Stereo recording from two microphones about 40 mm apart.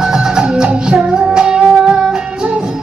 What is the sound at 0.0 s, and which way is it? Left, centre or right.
Music, centre.